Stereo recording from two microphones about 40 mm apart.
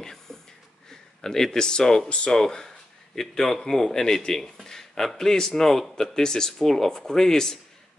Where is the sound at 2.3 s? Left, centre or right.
Centre.